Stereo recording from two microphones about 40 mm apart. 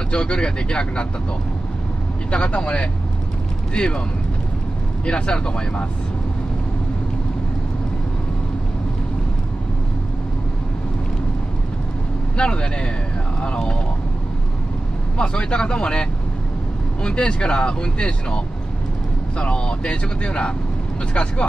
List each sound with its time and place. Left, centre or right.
0.1 s speech: left
2.3 s speech: left
5.0 s speech: left
12.4 s speech: left
15.1 s speech: left